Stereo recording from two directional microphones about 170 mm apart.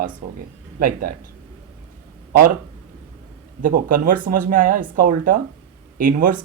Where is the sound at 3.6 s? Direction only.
55° right (ahead or behind).